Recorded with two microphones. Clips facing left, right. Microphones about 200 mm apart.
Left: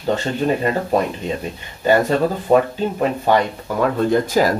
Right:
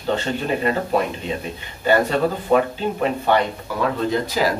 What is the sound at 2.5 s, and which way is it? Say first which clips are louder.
Speech: left 4 dB; 45° left (ahead or behind).